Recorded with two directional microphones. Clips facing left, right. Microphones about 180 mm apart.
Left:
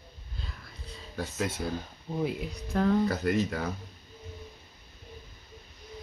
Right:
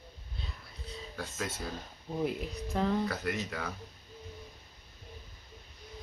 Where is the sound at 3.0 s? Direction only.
35° left (ahead or behind).